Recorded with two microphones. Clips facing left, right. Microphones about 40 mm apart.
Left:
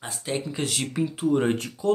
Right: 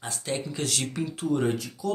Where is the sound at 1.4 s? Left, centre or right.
Left.